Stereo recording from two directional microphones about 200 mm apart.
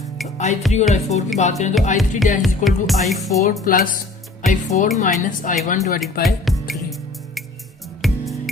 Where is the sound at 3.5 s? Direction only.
45° left (ahead or behind).